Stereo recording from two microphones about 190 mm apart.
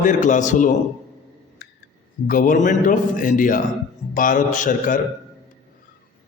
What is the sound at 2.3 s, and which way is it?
A man's voice, 45° left (ahead or behind).